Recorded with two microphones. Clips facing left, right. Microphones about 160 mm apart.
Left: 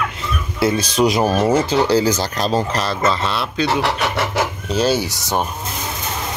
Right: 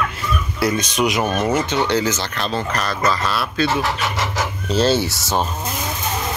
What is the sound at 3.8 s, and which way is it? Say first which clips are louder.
Speech: left 3 dB; 65° left (ahead or behind).